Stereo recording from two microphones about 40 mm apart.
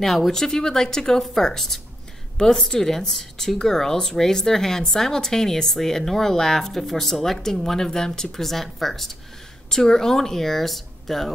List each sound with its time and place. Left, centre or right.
0.0 s speech: centre